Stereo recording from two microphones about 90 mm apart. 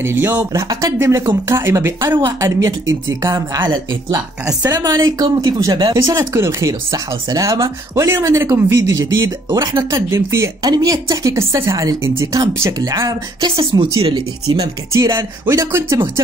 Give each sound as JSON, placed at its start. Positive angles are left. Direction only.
{"t": 0.0, "sound": "speech", "side_deg": -25}
{"t": 0.5, "sound": "speech", "side_deg": -40}
{"t": 0.9, "sound": "speech", "side_deg": -30}
{"t": 3.5, "sound": "speech", "side_deg": -55}
{"t": 4.7, "sound": "speech", "side_deg": -45}
{"t": 5.9, "sound": "speech", "side_deg": -35}
{"t": 10.6, "sound": "speech", "side_deg": -45}
{"t": 13.7, "sound": "speech", "side_deg": -70}
{"t": 14.9, "sound": "speech", "side_deg": -35}